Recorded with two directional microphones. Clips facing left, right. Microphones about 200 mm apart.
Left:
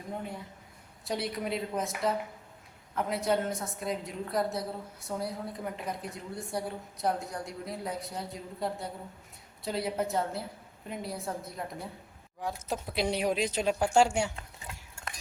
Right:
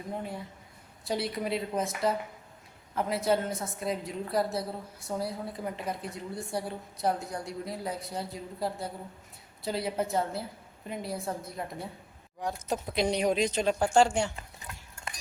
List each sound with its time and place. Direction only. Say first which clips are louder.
0.1 s a woman's voice: right 1 dB; centre (ahead or behind)